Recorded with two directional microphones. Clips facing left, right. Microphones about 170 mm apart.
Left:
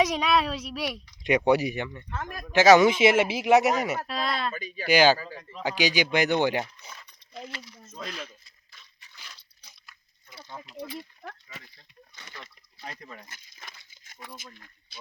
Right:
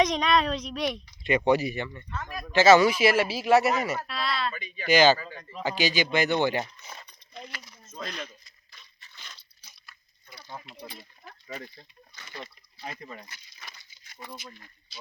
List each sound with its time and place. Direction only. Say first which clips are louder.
0.0 s speech: even; 5° left (ahead or behind)
2.0 s speech: left 1 dB; 55° left (ahead or behind)
2.5 s speech: left 1 dB; 15° left (ahead or behind)
4.0 s speech: left 1 dB; 45° left (ahead or behind)
4.9 s speech: even; 10° left (ahead or behind)
7.9 s speech: right 1 dB; 5° left (ahead or behind)
9.0 s crunch: even; 10° left (ahead or behind)
9.8 s a sound: right 2 dB; 20° left (ahead or behind)
11.4 s speech: right 9 dB; 50° right (ahead or behind)
12.8 s speech: right 2 dB; 5° right (ahead or behind)
13.2 s coin: even; 50° left (ahead or behind)
13.9 s a sound: even; 50° left (ahead or behind)
14.2 s speech: right 2 dB; 5° right (ahead or behind)